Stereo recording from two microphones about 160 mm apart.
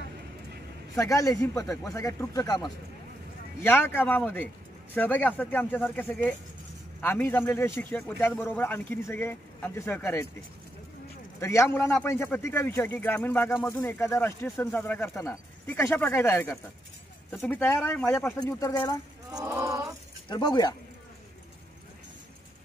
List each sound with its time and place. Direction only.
0.9 s speech: 20° left (ahead or behind)
3.6 s speech: 15° left (ahead or behind)
11.3 s speech: 15° left (ahead or behind)
19.4 s a sound: 20° right (ahead or behind)
20.2 s speech: 25° left (ahead or behind)